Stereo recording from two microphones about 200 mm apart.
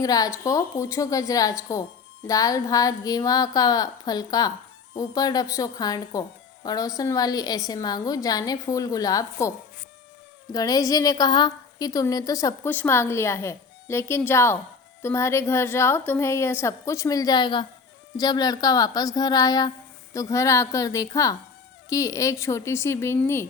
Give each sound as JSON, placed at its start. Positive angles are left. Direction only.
{"t": 0.0, "sound": "a woman's voice", "side_deg": 20}
{"t": 10.5, "sound": "a woman's voice", "side_deg": 20}